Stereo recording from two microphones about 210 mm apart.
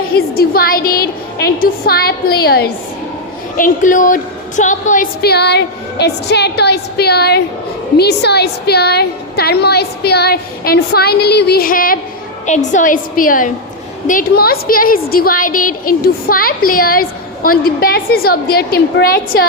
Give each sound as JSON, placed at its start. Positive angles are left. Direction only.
{"t": 0.1, "sound": "a woman's voice", "side_deg": 45}
{"t": 3.6, "sound": "a woman's voice", "side_deg": 40}